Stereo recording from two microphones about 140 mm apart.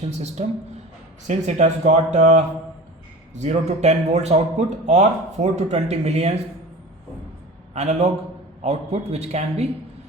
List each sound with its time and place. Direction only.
0.4 s a man's voice: 50° right (ahead or behind)
7.7 s a man's voice: 55° right (ahead or behind)